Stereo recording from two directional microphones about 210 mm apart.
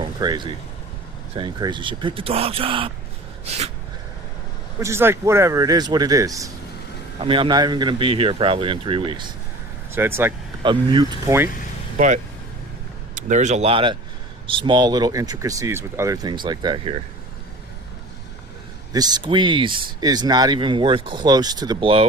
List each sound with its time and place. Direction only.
0.2 s speech: 20° right (ahead or behind)
3.4 s a sound: 30° right (ahead or behind)
4.8 s a man's voice: 10° right (ahead or behind)
9.9 s a man's voice: 10° right (ahead or behind)
10.6 s speech: 20° right (ahead or behind)
11.9 s speech: 40° right (ahead or behind)
18.9 s speech: 20° right (ahead or behind)